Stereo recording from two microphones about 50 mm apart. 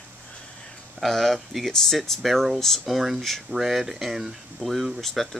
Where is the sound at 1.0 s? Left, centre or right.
Centre.